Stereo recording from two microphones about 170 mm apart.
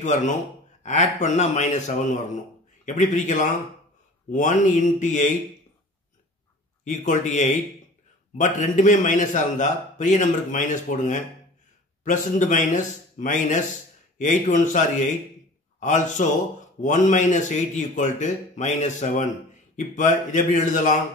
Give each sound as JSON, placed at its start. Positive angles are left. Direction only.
{"t": 0.0, "sound": "a man's voice", "side_deg": 45}
{"t": 6.8, "sound": "a man's voice", "side_deg": 45}